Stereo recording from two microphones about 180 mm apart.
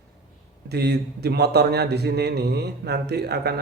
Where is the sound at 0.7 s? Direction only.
65° right (ahead or behind).